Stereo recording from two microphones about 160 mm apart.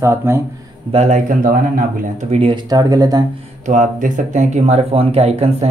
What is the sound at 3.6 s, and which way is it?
Speech, 55° right (ahead or behind).